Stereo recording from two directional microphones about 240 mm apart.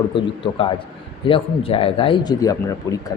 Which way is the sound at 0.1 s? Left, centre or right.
Left.